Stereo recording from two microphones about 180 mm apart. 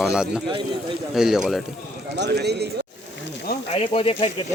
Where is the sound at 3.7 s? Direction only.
30° left (ahead or behind).